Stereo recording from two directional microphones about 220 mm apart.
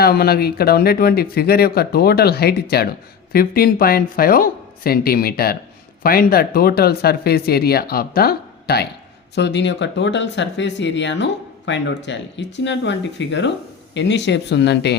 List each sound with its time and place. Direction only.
0.0 s speech: 45° left (ahead or behind)